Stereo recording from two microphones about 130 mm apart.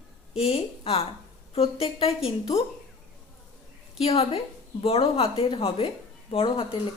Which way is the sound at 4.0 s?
50° left (ahead or behind).